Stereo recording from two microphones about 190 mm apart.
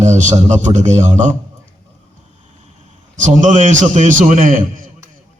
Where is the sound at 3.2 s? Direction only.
40° right (ahead or behind).